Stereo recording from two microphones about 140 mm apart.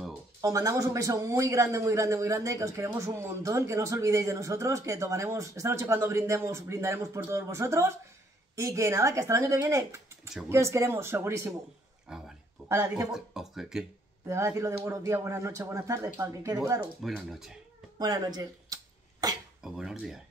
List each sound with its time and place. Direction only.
0.4 s speech: 25° right (ahead or behind)
12.1 s speech: 5° right (ahead or behind)
12.6 s speech: 20° right (ahead or behind)
13.1 s speech: 5° right (ahead or behind)
14.2 s speech: 20° right (ahead or behind)
17.0 s speech: centre (ahead or behind)
17.9 s speech: 30° right (ahead or behind)
19.6 s speech: 5° right (ahead or behind)